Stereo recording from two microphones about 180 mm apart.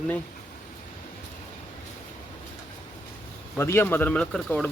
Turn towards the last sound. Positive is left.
turn(degrees=5)  # may be behind; listen again after turning